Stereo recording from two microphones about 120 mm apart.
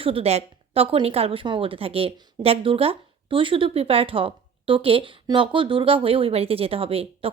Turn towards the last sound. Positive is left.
turn(degrees=-55)  # may be behind; listen again after turning